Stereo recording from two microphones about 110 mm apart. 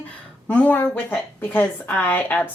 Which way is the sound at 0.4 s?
15° left (ahead or behind).